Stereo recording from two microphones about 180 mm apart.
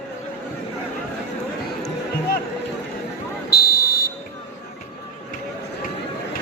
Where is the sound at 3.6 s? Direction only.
60° left (ahead or behind).